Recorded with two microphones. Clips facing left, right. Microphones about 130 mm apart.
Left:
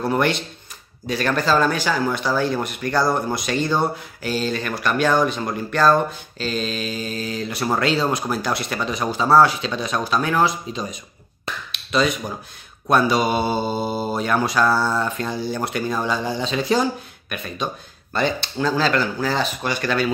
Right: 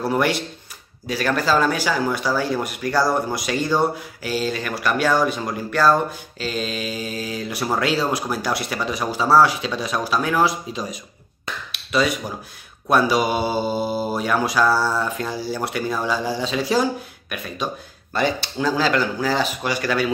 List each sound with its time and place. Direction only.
0.0 s speech: 5° right (ahead or behind)
11.7 s a sound: 5° right (ahead or behind)
12.9 s speech: 10° right (ahead or behind)
18.1 s speech: 10° right (ahead or behind)